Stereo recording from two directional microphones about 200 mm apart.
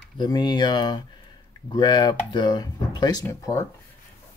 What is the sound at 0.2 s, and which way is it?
Speech, 20° left (ahead or behind).